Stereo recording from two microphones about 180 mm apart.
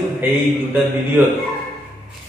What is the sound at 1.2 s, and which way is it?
Speech, 15° right (ahead or behind).